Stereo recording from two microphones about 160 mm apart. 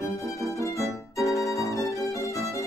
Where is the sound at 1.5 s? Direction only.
20° left (ahead or behind).